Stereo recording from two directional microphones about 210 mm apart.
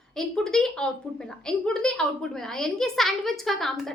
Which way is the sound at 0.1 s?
Centre (ahead or behind).